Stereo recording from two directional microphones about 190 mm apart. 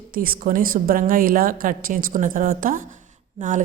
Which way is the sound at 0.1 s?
50° right (ahead or behind).